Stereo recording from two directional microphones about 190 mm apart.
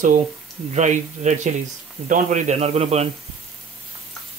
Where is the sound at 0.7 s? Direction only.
40° right (ahead or behind).